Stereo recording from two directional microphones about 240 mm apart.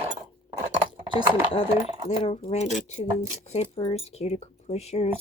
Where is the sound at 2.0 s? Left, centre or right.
Left.